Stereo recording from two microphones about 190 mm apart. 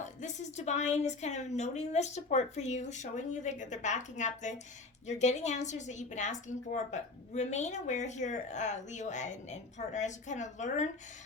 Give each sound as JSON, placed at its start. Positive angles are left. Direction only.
{"t": 0.0, "sound": "a woman's voice", "side_deg": 40}